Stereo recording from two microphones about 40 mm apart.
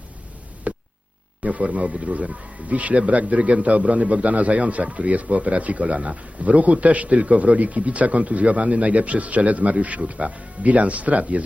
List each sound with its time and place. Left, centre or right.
0.7 s hum: right
1.5 s speech: right